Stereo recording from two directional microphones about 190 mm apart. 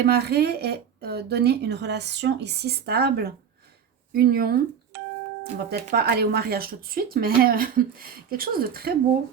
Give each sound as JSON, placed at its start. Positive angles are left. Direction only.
{"t": 0.0, "sound": "speech", "side_deg": -55}